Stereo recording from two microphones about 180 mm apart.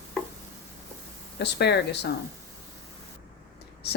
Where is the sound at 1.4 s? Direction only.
70° left (ahead or behind).